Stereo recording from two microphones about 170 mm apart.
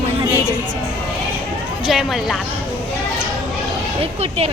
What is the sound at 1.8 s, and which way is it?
Speech, centre (ahead or behind).